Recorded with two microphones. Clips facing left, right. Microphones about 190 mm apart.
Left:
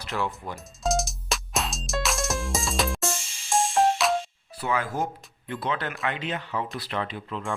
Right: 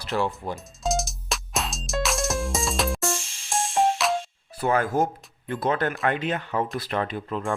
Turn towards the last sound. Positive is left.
turn(degrees=-45)  # may be behind; listen again after turning